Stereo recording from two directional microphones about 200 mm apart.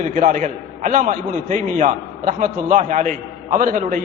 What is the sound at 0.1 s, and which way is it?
A man's voice, 40° right (ahead or behind).